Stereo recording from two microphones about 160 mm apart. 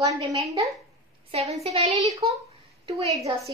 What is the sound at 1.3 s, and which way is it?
A woman's voice, 40° right (ahead or behind).